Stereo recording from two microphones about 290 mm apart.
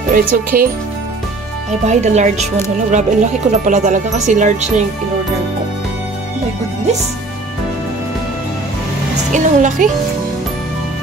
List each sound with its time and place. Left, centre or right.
0.1 s speech: right
1.9 s speech: right
9.3 s speech: right